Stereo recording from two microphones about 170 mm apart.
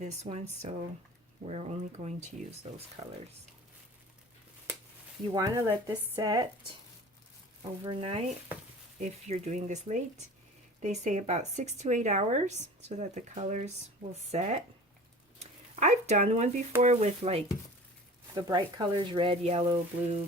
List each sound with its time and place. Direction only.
0.0 s speech: 40° right (ahead or behind)
5.3 s speech: 20° right (ahead or behind)
7.6 s speech: 30° right (ahead or behind)
15.4 s a sound: 40° right (ahead or behind)
16.8 s speech: 45° right (ahead or behind)
18.3 s speech: 25° right (ahead or behind)